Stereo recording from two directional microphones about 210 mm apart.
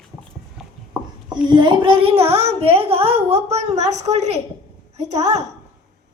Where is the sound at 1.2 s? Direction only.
20° right (ahead or behind).